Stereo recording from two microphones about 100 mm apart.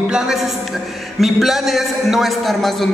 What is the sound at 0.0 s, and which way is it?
A woman's voice, 5° right (ahead or behind).